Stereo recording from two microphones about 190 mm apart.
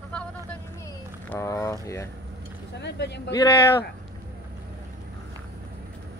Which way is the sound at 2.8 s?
65° left (ahead or behind).